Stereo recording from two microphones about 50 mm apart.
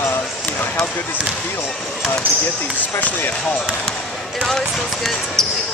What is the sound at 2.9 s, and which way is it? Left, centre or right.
Speech, left.